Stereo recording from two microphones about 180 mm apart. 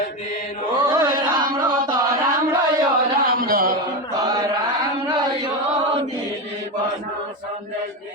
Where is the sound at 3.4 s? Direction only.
55° right (ahead or behind).